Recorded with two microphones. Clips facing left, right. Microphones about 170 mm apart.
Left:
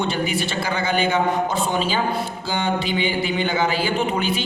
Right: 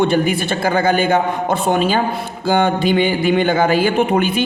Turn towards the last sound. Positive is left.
turn(degrees=-55)  # may be behind; listen again after turning